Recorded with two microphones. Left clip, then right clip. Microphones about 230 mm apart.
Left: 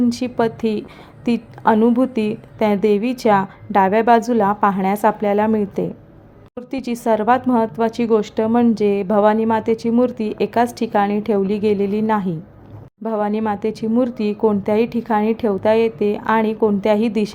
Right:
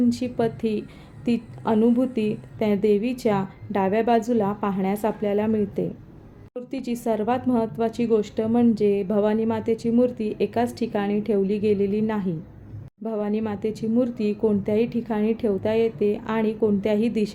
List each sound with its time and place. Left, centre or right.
0.1 s a woman's voice: centre